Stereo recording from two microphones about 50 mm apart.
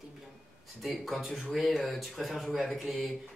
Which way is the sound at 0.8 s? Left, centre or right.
Centre.